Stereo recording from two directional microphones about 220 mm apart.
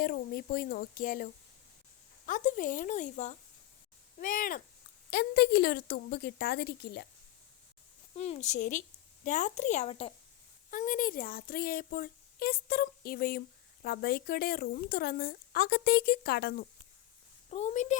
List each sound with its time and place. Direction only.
0.0 s a woman's voice: 40° left (ahead or behind)
8.1 s a woman's voice: 30° left (ahead or behind); by 16.6 s 45° left (ahead or behind)
17.5 s speech: 30° left (ahead or behind)